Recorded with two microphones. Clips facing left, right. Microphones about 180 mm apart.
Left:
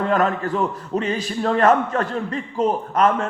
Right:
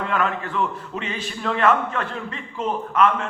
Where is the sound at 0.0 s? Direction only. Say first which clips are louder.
Left 5 dB; 40° left (ahead or behind).